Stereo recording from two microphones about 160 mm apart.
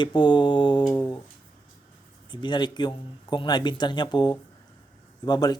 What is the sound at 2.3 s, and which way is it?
Speech, 25° left (ahead or behind).